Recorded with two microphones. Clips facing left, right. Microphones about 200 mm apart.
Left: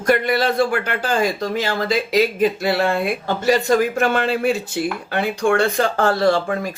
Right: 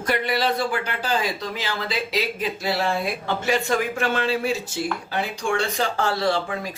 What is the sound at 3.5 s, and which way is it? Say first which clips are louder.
Speech: left 7 dB; 40° left (ahead or behind).